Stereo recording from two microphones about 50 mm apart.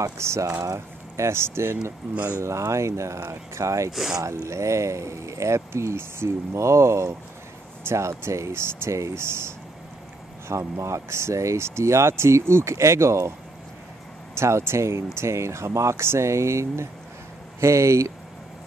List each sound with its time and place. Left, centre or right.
0.0 s speech: right
2.4 s speech: right
10.5 s speech: right
14.3 s speech: right